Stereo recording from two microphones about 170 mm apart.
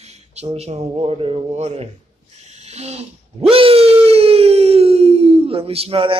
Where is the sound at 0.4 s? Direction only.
40° right (ahead or behind).